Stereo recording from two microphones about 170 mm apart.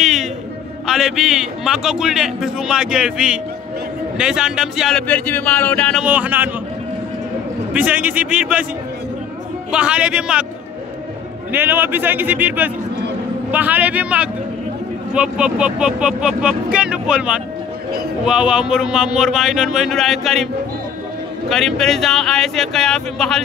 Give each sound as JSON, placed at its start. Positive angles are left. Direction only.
{"t": 0.0, "sound": "a sound", "side_deg": 0}
{"t": 0.8, "sound": "a man's voice", "side_deg": 0}
{"t": 6.0, "sound": "a man's voice", "side_deg": -10}
{"t": 7.7, "sound": "a man's voice", "side_deg": -10}
{"t": 9.7, "sound": "a man's voice", "side_deg": -5}
{"t": 11.5, "sound": "a man's voice", "side_deg": -10}
{"t": 21.5, "sound": "a man's voice", "side_deg": 0}